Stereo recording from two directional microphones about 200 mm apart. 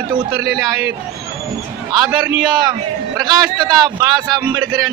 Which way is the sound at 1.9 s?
20° right (ahead or behind).